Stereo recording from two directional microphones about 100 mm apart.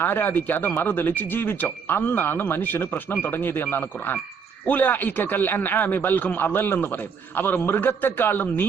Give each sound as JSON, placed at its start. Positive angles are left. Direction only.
{"t": 0.0, "sound": "speech", "side_deg": 20}